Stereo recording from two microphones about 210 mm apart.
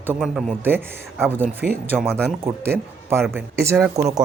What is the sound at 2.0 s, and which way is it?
Speech, centre (ahead or behind).